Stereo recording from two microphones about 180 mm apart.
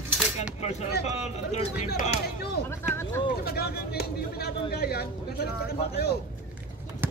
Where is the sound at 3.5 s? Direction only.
60° left (ahead or behind).